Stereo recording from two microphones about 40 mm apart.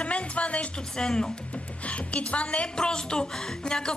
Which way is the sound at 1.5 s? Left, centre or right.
Left.